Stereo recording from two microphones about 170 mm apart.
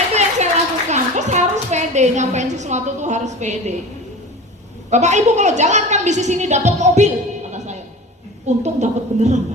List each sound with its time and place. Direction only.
0.1 s a sound: 40° right (ahead or behind)
4.9 s a woman's voice: 45° right (ahead or behind)
8.4 s a woman's voice: 45° right (ahead or behind)